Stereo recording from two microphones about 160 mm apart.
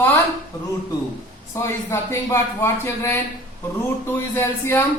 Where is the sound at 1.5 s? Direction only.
15° left (ahead or behind).